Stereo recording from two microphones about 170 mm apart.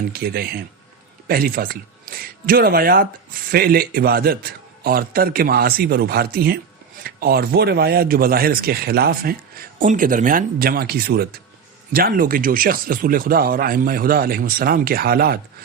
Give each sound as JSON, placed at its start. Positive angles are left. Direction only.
{"t": 0.1, "sound": "speech", "side_deg": -60}